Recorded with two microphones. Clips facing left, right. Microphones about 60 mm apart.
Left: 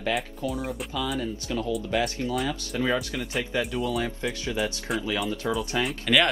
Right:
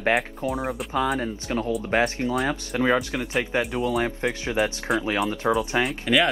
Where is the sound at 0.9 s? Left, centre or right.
Right.